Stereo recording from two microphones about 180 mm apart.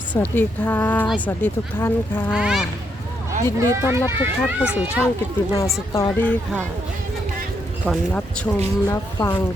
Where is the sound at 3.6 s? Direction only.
15° right (ahead or behind).